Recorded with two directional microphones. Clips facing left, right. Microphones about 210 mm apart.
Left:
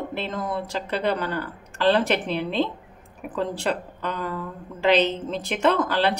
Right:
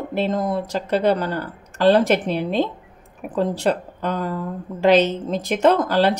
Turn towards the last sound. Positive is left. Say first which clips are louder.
# right 5 dB
turn(degrees=-40)  # may be behind; listen again after turning